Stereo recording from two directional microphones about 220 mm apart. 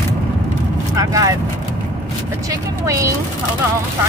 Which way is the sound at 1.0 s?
15° right (ahead or behind).